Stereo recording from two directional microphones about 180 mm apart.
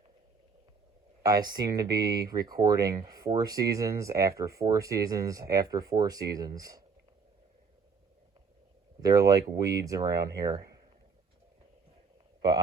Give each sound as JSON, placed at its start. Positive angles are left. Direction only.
{"t": 1.2, "sound": "speech", "side_deg": -20}
{"t": 9.0, "sound": "speech", "side_deg": -20}
{"t": 12.4, "sound": "speech", "side_deg": -20}